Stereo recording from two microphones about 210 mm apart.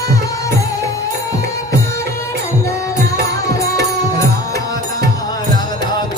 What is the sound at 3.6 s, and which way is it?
Music, 15° left (ahead or behind).